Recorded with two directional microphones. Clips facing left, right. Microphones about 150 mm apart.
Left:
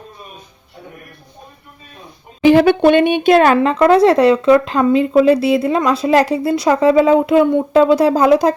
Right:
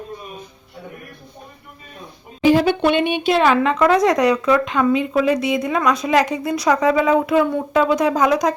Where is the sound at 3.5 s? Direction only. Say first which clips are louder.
Left 4 dB; 30° left (ahead or behind).